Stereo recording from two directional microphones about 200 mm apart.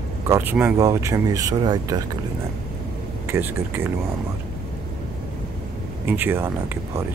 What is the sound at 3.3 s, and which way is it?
Speech, 10° right (ahead or behind).